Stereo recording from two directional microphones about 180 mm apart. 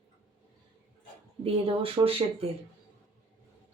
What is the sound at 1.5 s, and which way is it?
Speech, 30° right (ahead or behind).